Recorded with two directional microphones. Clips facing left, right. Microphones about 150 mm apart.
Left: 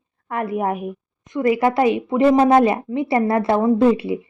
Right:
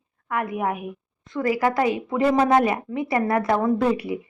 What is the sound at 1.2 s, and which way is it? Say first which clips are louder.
Speech: left 4 dB; 20° left (ahead or behind).